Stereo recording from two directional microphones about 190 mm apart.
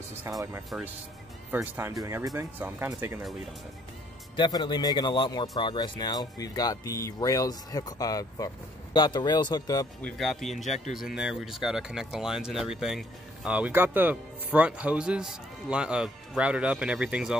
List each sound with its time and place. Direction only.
0.3 s speech: 15° right (ahead or behind)
4.4 s a man's voice: 20° left (ahead or behind)
10.0 s speech: centre (ahead or behind)
10.5 s a man's voice: 35° left (ahead or behind)
10.9 s speech: centre (ahead or behind)